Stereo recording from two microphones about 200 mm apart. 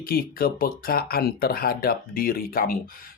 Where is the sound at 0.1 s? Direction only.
50° left (ahead or behind).